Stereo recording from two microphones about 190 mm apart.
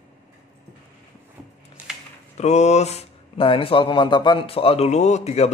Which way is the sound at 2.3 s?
35° left (ahead or behind).